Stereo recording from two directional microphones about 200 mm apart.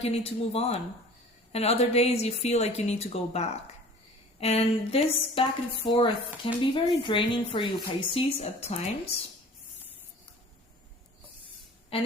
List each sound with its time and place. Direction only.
0.0 s a woman's voice: 30° left (ahead or behind)
11.9 s speech: 25° left (ahead or behind)